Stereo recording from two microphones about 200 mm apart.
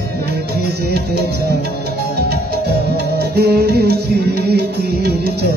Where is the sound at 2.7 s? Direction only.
55° right (ahead or behind).